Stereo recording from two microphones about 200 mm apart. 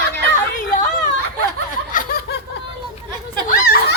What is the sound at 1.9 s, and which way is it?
Snicker, 45° left (ahead or behind).